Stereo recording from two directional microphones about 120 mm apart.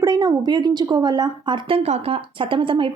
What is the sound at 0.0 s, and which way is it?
Speech, 30° right (ahead or behind).